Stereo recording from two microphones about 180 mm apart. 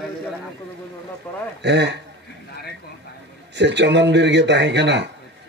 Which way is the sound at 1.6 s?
70° right (ahead or behind).